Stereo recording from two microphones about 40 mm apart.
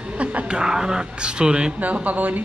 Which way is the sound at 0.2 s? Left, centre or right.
Right.